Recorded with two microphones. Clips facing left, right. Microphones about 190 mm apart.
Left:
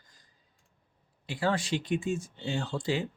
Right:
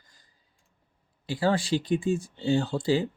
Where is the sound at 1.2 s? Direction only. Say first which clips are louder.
Right 4 dB; 35° right (ahead or behind).